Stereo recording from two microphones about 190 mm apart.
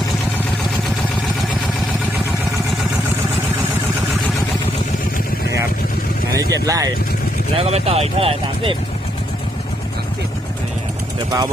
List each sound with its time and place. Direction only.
6.3 s speech: 20° right (ahead or behind)
7.5 s speech: 30° right (ahead or behind)